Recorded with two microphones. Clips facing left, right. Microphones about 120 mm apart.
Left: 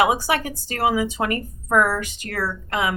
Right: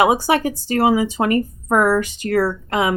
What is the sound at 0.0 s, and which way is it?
Speech, 30° right (ahead or behind).